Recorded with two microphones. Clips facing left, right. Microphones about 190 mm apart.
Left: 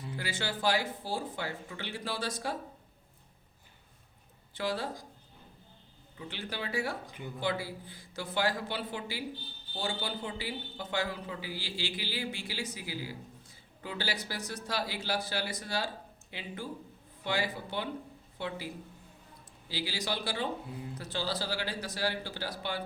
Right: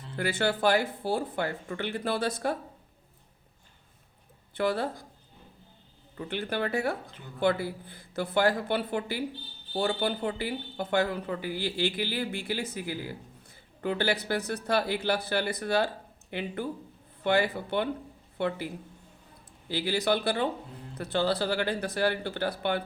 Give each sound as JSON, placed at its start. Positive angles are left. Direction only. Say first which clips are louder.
{"t": 0.2, "sound": "speech", "louder": "right 9 dB", "side_deg": -60}
{"t": 4.5, "sound": "speech", "louder": "right 6 dB", "side_deg": -60}
{"t": 6.1, "sound": "speech", "louder": "right 8 dB", "side_deg": -55}